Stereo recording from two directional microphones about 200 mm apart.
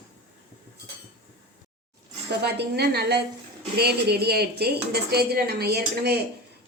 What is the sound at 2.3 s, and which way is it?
Speech, 55° right (ahead or behind).